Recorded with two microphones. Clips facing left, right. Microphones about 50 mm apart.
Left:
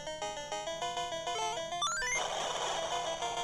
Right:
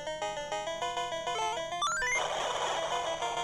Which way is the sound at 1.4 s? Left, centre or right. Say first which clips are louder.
Right 3 dB; right.